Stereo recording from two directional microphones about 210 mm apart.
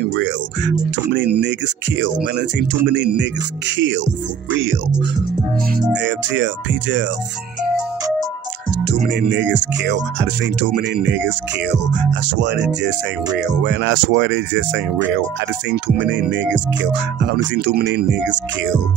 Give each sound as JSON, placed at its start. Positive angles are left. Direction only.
{"t": 0.1, "sound": "music", "side_deg": -60}
{"t": 2.3, "sound": "speech", "side_deg": -55}
{"t": 5.9, "sound": "speech", "side_deg": -60}
{"t": 8.8, "sound": "speech", "side_deg": -55}
{"t": 10.4, "sound": "speech", "side_deg": -45}